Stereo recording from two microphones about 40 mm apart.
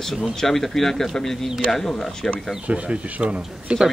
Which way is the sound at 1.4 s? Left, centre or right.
Centre.